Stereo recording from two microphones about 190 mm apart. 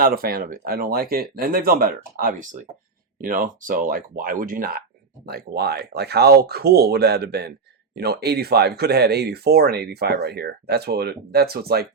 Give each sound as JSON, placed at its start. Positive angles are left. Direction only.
{"t": 0.0, "sound": "speech", "side_deg": -50}